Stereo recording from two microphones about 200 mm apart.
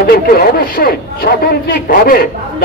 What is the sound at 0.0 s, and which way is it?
A man's voice, 50° left (ahead or behind).